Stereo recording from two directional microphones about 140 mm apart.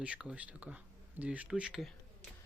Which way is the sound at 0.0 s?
5° right (ahead or behind).